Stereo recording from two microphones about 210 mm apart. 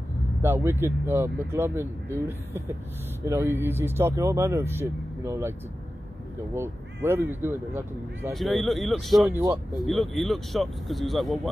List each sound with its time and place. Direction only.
0.4 s speech: 10° right (ahead or behind)
6.5 s speech: 10° right (ahead or behind)
8.3 s speech: centre (ahead or behind)
9.4 s speech: 15° right (ahead or behind)
9.8 s speech: centre (ahead or behind)